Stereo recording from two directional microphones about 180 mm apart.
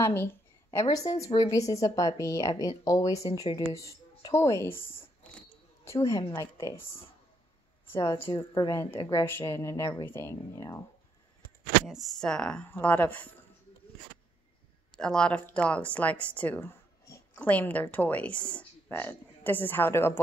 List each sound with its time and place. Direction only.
0.0 s a woman's voice: 10° left (ahead or behind)
4.7 s speech: 30° left (ahead or behind)
5.2 s a sound: 5° left (ahead or behind)
5.9 s a woman's voice: 15° left (ahead or behind)
8.0 s a woman's voice: 25° left (ahead or behind)
11.8 s speech: centre (ahead or behind)
15.0 s a woman's voice: 5° left (ahead or behind)
17.1 s a sound: 10° left (ahead or behind)
17.9 s a woman's voice: 10° left (ahead or behind)